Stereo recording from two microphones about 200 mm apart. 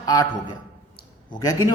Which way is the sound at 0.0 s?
20° left (ahead or behind).